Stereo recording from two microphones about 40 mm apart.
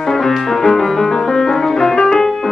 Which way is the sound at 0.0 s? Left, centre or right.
Centre.